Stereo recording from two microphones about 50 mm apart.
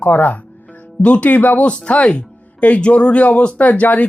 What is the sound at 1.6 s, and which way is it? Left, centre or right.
Speech, left.